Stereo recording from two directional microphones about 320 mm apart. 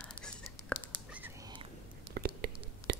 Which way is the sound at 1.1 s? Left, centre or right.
Centre.